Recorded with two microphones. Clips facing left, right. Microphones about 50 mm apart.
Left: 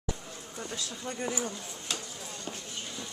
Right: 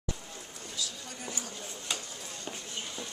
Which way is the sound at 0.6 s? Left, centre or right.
Left.